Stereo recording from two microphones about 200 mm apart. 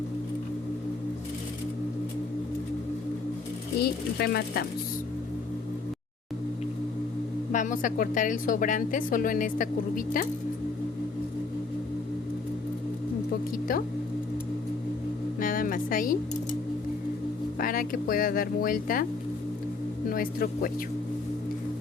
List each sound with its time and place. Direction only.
3.8 s speech: 50° left (ahead or behind)
7.5 s a woman's voice: 40° left (ahead or behind)
15.4 s speech: 45° left (ahead or behind)
17.6 s speech: 45° left (ahead or behind)
20.1 s speech: 45° left (ahead or behind)